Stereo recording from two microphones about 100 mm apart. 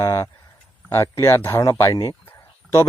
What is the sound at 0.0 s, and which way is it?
Speech, 30° left (ahead or behind).